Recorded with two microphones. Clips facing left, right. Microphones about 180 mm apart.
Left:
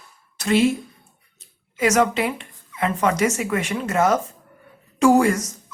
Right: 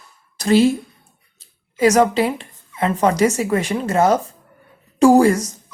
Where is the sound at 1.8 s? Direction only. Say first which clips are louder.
Right 4 dB; 35° right (ahead or behind).